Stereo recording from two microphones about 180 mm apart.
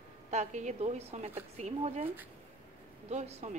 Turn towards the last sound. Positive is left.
turn(degrees=-40)  # may be behind; listen again after turning